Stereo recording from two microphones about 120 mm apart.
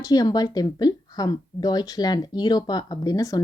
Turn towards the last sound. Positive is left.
turn(degrees=30)  # may be behind; listen again after turning